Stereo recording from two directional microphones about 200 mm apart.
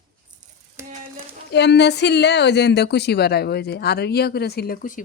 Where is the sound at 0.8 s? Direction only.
15° right (ahead or behind).